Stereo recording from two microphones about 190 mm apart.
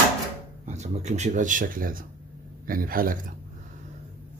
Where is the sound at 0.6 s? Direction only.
35° right (ahead or behind).